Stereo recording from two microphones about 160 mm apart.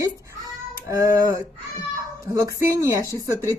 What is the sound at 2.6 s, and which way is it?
Speech, 15° right (ahead or behind).